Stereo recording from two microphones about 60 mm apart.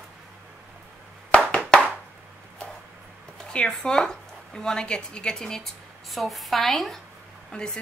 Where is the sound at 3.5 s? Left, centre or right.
Centre.